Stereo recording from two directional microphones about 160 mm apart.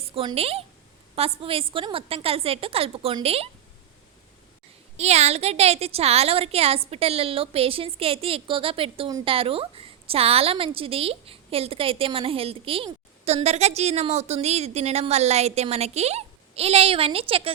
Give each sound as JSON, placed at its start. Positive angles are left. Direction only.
{"t": 0.1, "sound": "a woman's voice", "side_deg": -35}
{"t": 4.9, "sound": "a woman's voice", "side_deg": -40}